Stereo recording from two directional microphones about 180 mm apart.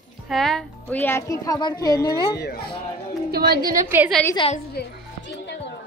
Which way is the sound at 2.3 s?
60° left (ahead or behind).